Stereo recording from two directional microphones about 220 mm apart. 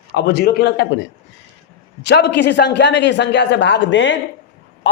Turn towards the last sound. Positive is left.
turn(degrees=55)  # may be behind; listen again after turning